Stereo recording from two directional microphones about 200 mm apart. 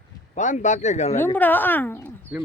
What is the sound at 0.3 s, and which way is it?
Speech, 40° left (ahead or behind).